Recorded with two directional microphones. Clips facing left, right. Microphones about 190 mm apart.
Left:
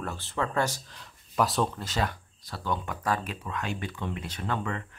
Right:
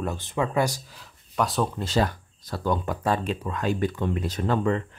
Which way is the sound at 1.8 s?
35° right (ahead or behind).